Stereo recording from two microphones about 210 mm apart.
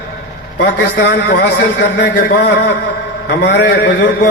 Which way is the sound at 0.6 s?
50° left (ahead or behind).